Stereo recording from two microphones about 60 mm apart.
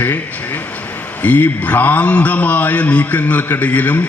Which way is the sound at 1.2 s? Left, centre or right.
Left.